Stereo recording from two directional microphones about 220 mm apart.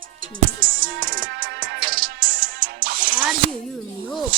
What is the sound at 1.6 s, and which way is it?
Music, 60° right (ahead or behind).